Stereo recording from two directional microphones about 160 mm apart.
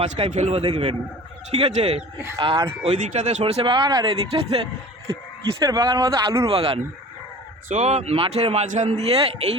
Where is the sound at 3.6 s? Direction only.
30° right (ahead or behind).